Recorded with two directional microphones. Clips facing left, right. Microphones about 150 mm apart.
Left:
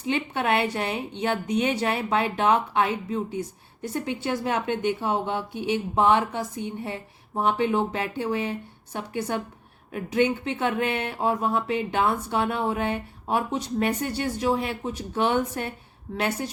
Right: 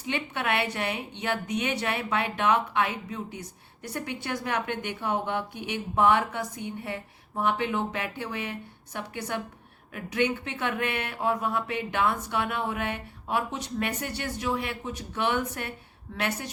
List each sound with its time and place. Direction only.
0.1 s a woman's voice: 35° left (ahead or behind)